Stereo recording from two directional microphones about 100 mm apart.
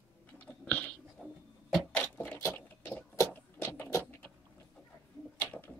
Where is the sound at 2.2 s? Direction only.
20° left (ahead or behind).